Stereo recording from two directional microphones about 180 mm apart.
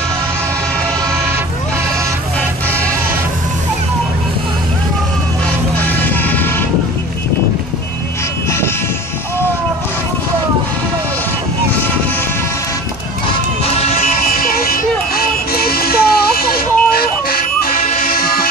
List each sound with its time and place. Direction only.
5.8 s vehicle: 10° left (ahead or behind)
8.5 s vehicle: 15° left (ahead or behind)
14.0 s vehicle: 55° left (ahead or behind)
17.9 s music: 55° left (ahead or behind)